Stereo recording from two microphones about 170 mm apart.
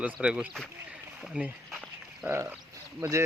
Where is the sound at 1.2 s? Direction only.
5° right (ahead or behind).